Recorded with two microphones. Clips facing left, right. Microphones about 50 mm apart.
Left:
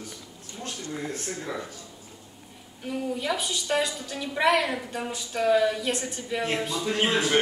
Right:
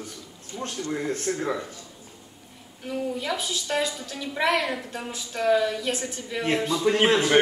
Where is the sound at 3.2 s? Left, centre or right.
Centre.